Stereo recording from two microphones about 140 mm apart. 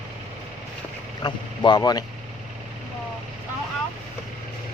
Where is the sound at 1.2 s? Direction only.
30° left (ahead or behind).